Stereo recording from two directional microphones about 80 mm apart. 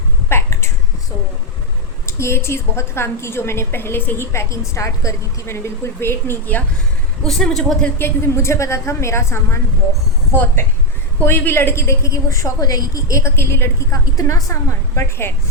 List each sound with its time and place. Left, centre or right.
0.3 s a sound: left
2.0 s a woman's voice: left
7.3 s a woman's voice: centre
7.9 s a woman's voice: left